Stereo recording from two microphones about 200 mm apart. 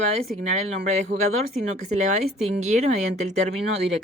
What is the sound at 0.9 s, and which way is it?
A woman's voice, 35° right (ahead or behind).